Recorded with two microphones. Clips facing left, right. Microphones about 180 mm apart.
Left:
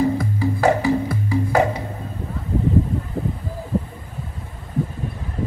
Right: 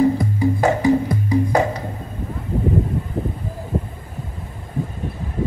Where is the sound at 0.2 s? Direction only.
15° right (ahead or behind).